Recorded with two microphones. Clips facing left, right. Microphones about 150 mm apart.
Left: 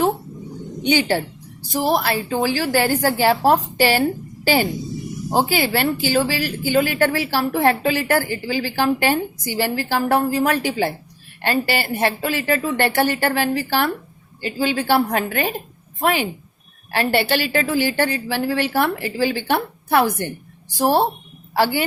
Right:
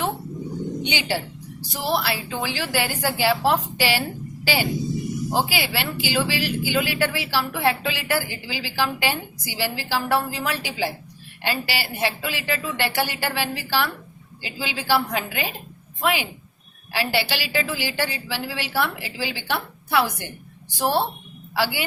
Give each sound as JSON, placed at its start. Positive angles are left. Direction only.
{"t": 0.8, "sound": "a woman's voice", "side_deg": 45}